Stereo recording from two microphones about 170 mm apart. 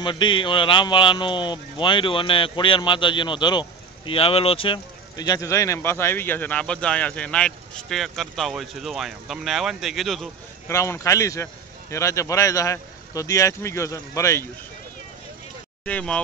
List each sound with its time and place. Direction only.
0.0 s a man's voice: 30° left (ahead or behind); by 10.3 s centre (ahead or behind)
10.7 s speech: 15° left (ahead or behind)
15.8 s speech: 5° left (ahead or behind)